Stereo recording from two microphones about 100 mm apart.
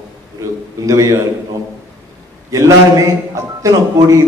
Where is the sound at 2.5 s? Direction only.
30° right (ahead or behind).